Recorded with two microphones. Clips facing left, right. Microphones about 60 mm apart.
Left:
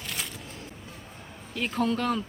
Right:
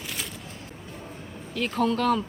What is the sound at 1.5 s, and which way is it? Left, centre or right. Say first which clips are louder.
Speech: right 2 dB; centre.